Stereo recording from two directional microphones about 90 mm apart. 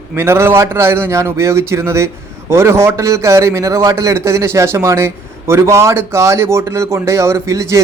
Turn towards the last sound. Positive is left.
turn(degrees=-35)  # may be behind; listen again after turning